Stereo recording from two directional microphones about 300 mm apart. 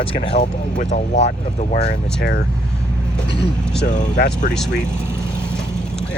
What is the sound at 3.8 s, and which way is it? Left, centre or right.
Speech, left.